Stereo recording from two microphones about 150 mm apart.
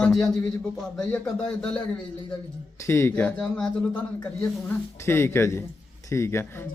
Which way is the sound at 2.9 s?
15° left (ahead or behind).